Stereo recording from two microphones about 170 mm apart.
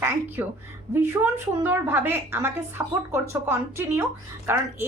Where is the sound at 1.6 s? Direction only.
10° right (ahead or behind).